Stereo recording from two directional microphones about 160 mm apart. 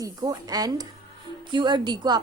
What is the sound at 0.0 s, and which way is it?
A woman's voice, 25° right (ahead or behind).